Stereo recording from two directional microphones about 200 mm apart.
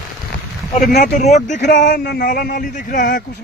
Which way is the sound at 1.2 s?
35° left (ahead or behind).